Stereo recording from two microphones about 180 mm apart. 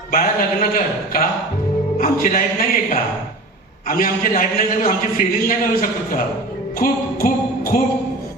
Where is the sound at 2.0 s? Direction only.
50° left (ahead or behind).